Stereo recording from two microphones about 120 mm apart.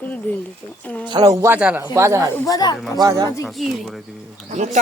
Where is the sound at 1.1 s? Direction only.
35° right (ahead or behind).